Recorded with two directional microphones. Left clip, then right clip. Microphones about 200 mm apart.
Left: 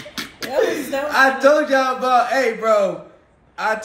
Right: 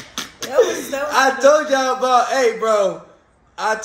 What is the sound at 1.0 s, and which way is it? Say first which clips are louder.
A man's voice: right 1 dB; 20° right (ahead or behind).